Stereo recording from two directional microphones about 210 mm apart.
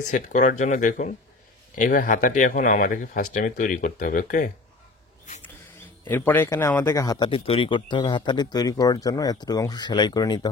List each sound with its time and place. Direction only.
0.1 s speech: 40° left (ahead or behind)
6.0 s speech: 10° left (ahead or behind)